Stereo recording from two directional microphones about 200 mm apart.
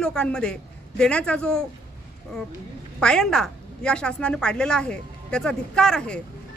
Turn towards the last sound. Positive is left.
turn(degrees=5)  # may be behind; listen again after turning